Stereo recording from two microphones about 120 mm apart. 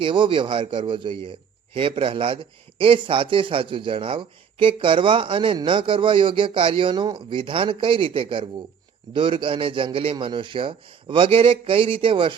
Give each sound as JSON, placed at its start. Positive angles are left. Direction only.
{"t": 0.0, "sound": "a man's voice", "side_deg": -45}